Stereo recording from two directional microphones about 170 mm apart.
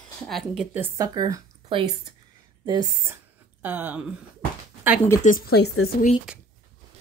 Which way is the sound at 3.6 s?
10° right (ahead or behind).